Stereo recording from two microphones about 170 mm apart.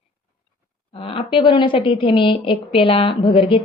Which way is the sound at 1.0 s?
30° left (ahead or behind).